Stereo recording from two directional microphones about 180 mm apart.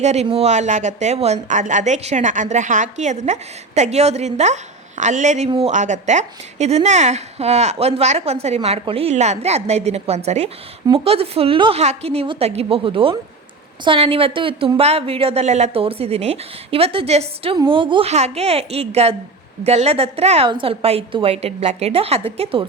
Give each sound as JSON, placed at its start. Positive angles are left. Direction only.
{"t": 0.0, "sound": "a woman's voice", "side_deg": -40}